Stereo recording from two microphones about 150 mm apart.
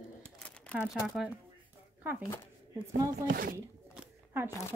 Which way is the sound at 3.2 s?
75° right (ahead or behind).